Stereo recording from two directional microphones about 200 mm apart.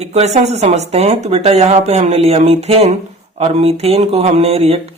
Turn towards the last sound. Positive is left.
turn(degrees=-30)  # may be behind; listen again after turning